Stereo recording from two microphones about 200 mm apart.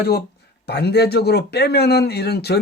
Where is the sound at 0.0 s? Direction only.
55° left (ahead or behind).